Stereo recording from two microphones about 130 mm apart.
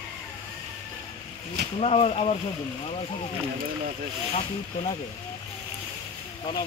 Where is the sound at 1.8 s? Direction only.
50° left (ahead or behind).